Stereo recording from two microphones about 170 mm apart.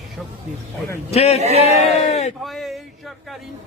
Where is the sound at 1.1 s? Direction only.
40° left (ahead or behind).